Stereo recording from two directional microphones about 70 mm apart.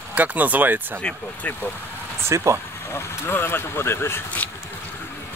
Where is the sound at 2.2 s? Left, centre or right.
Right.